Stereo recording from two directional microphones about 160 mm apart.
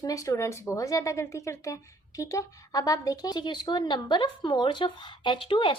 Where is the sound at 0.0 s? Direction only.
20° left (ahead or behind).